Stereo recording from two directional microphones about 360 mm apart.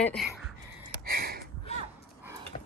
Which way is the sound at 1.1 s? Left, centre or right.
Right.